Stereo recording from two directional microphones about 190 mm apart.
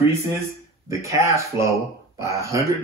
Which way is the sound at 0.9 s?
15° right (ahead or behind).